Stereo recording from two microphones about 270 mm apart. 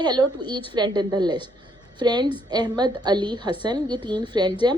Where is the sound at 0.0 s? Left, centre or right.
Centre.